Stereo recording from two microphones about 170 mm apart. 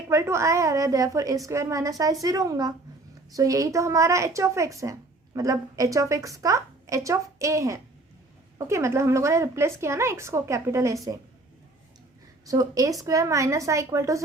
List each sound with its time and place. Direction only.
0.1 s a woman's voice: 15° right (ahead or behind)
12.5 s a woman's voice: 20° right (ahead or behind)